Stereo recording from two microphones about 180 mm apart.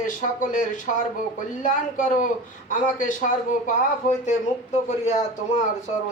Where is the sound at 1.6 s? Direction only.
45° left (ahead or behind).